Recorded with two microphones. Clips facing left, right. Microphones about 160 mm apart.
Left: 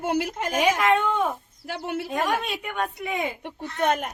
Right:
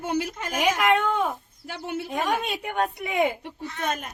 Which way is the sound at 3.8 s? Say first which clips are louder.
Left 6 dB; 65° left (ahead or behind).